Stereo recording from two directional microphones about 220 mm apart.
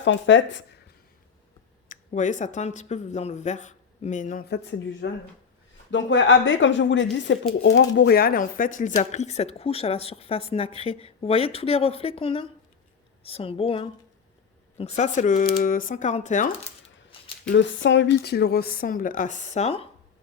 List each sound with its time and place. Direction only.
0.0 s speech: 55° left (ahead or behind)
1.9 s a woman's voice: 35° left (ahead or behind)
17.5 s a woman's voice: 55° left (ahead or behind); by 19.9 s 30° left (ahead or behind)